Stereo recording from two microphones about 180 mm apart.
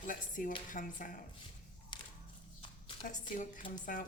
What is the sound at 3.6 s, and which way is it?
Speech, 30° left (ahead or behind).